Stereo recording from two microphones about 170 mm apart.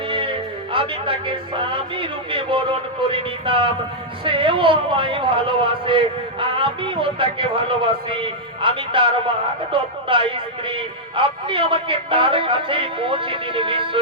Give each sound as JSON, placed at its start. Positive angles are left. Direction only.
{"t": 0.1, "sound": "a man's voice", "side_deg": -30}